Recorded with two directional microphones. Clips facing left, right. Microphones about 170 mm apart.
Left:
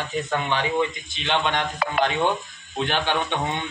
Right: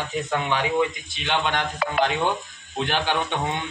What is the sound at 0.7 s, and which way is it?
Speech, 20° left (ahead or behind).